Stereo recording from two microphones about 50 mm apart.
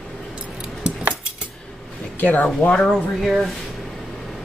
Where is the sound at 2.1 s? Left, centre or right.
Left.